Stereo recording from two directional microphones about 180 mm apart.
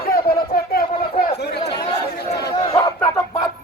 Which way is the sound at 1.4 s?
65° left (ahead or behind).